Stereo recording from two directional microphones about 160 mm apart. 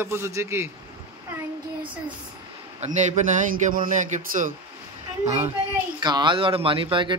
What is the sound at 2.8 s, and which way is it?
Speech, 45° right (ahead or behind).